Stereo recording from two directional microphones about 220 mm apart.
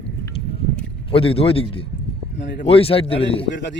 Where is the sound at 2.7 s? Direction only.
25° left (ahead or behind).